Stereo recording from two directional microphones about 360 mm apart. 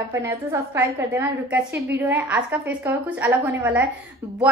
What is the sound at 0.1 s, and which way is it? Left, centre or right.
A woman's voice, centre.